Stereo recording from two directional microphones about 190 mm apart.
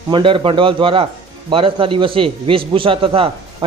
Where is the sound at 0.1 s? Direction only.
25° right (ahead or behind).